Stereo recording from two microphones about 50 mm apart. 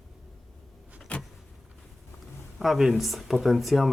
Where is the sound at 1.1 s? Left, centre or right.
Left.